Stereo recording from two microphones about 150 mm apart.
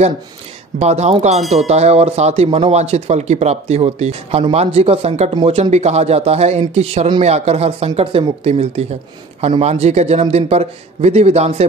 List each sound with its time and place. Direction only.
0.7 s speech: 45° right (ahead or behind)